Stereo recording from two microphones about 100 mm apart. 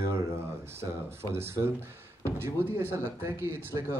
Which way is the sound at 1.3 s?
25° right (ahead or behind).